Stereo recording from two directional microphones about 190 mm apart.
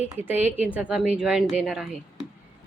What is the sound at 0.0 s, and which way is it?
A woman's voice, 10° right (ahead or behind).